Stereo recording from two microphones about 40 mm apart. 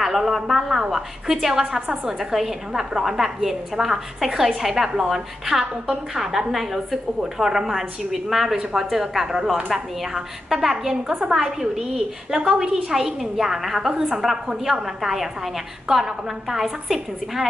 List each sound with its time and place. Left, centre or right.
0.0 s a woman's voice: centre
12.4 s a woman's voice: right
12.9 s a woman's voice: centre